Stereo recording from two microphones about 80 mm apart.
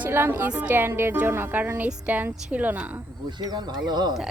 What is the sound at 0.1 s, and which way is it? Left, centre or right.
A woman's voice, right.